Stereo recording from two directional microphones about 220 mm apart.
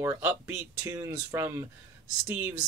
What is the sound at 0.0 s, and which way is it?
Speech, 10° right (ahead or behind).